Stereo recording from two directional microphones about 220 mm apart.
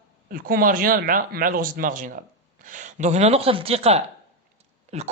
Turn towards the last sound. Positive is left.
turn(degrees=-30)  # may be behind; listen again after turning